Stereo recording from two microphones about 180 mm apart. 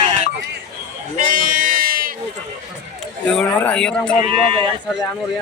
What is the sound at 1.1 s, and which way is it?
Sheep, 50° right (ahead or behind).